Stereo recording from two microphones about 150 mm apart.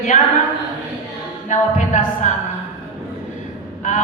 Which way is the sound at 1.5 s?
55° left (ahead or behind).